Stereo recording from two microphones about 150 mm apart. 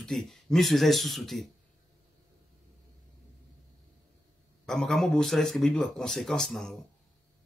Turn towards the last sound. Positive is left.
turn(degrees=5)  # may be behind; listen again after turning